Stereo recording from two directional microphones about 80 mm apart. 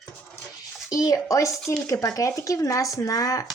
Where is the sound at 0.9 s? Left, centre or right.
Left.